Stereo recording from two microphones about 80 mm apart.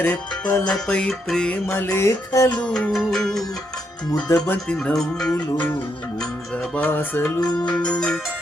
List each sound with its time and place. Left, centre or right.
0.0 s music: left
1.6 s music: left
2.0 s music: left
2.6 s music: centre
2.9 s music: centre
4.3 s music: left
4.7 s music: centre
6.7 s music: left
7.4 s music: left
7.8 s music: centre